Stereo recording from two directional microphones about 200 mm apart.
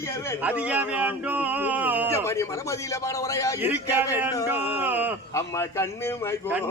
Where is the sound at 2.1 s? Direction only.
15° left (ahead or behind).